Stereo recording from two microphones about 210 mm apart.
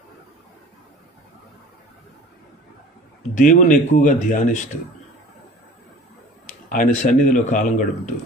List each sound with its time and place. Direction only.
3.3 s speech: 35° left (ahead or behind)
6.7 s speech: 40° left (ahead or behind)